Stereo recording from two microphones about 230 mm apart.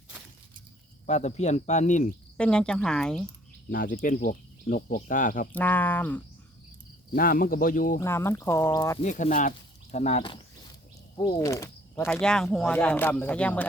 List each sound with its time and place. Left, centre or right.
1.0 s speech: left
2.4 s speech: centre
3.7 s speech: left
5.5 s speech: centre
7.2 s speech: left
7.9 s speech: centre
9.0 s speech: left; by 12.0 s centre
12.0 s speech: centre